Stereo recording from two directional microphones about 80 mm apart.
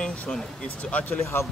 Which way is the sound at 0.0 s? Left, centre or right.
Centre.